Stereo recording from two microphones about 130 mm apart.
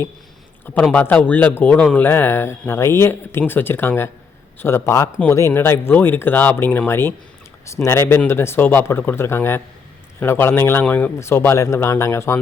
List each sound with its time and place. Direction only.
0.6 s a man's voice: 15° left (ahead or behind)